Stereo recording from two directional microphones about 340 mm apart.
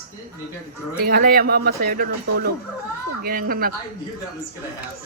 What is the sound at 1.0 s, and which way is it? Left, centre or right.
Speech, right.